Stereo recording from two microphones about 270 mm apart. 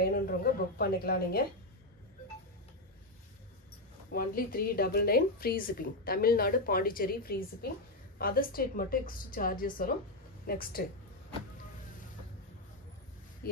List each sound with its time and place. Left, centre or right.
0.1 s a woman's voice: left
4.1 s a woman's voice: left
13.4 s speech: left